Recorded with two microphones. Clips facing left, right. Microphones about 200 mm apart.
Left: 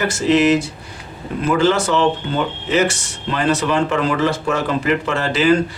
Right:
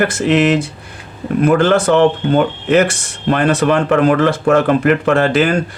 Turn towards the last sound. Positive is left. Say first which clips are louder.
# right 4 dB
turn(degrees=-55)  # may be behind; listen again after turning